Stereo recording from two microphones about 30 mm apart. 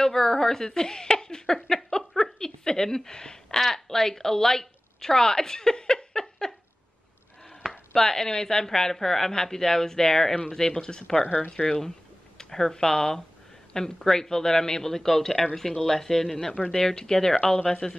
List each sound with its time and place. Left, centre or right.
0.0 s a woman's voice: centre
1.9 s a sound: left
3.5 s a woman's voice: centre
7.9 s a woman's voice: centre
12.4 s a woman's voice: centre